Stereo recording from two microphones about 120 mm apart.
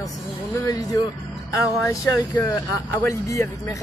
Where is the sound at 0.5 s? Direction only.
30° left (ahead or behind).